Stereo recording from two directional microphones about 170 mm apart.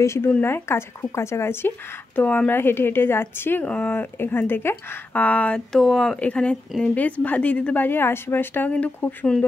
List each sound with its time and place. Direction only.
0.0 s a woman's voice: 15° left (ahead or behind)